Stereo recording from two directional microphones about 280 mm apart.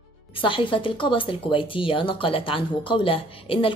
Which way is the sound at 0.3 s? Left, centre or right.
Centre.